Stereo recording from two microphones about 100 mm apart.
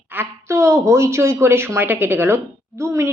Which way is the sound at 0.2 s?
25° right (ahead or behind).